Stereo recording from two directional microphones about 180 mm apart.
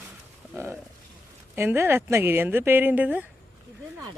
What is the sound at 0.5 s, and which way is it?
Speech, 10° right (ahead or behind).